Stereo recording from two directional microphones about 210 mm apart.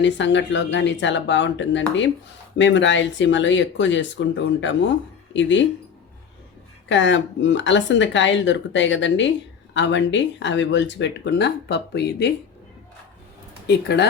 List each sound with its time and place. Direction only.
0.0 s speech: 60° left (ahead or behind)
6.8 s speech: 60° left (ahead or behind)
13.7 s speech: 55° left (ahead or behind)